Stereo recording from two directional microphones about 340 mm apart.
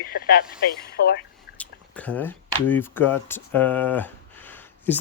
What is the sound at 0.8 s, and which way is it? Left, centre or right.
Speech, left.